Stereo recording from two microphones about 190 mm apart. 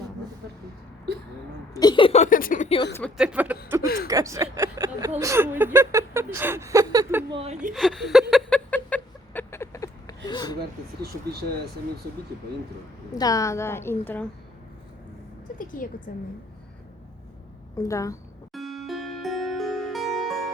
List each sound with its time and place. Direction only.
1.7 s speech: 20° left (ahead or behind); by 2.6 s 45° left (ahead or behind)
3.2 s speech: 5° right (ahead or behind)
3.8 s a woman's voice: 55° left (ahead or behind)
4.1 s speech: 15° right (ahead or behind)
7.3 s speech: 30° right (ahead or behind)
7.7 s a sound: centre (ahead or behind)
10.2 s speech: 20° left (ahead or behind)
10.6 s speech: 55° right (ahead or behind)
13.1 s a woman's voice: 20° left (ahead or behind)
15.5 s a woman's voice: 45° left (ahead or behind)
17.7 s a woman's voice: 15° left (ahead or behind)
18.5 s music: centre (ahead or behind)